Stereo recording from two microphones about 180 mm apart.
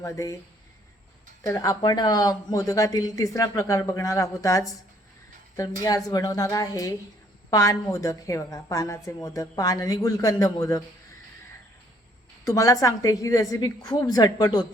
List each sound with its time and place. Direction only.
0.0 s a woman's voice: 20° left (ahead or behind)
1.5 s speech: 20° left (ahead or behind)
6.1 s a woman's voice: 20° left (ahead or behind)
12.5 s speech: 20° left (ahead or behind)